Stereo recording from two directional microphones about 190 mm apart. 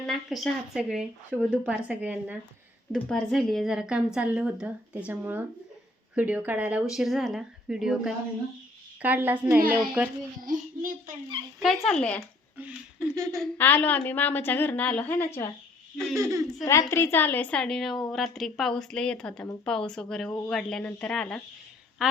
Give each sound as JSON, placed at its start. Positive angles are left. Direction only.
{"t": 0.0, "sound": "a woman's voice", "side_deg": 0}
{"t": 2.9, "sound": "a woman's voice", "side_deg": 0}
{"t": 10.4, "sound": "a child's voice", "side_deg": -45}
{"t": 11.6, "sound": "a woman's voice", "side_deg": 0}
{"t": 12.5, "sound": "speech", "side_deg": -10}
{"t": 13.3, "sound": "a woman's voice", "side_deg": 5}
{"t": 16.1, "sound": "speech", "side_deg": -15}
{"t": 16.9, "sound": "a woman's voice", "side_deg": 15}